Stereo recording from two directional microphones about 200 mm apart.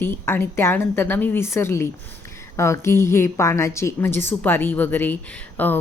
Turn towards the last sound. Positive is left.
turn(degrees=10)  # may be behind; listen again after turning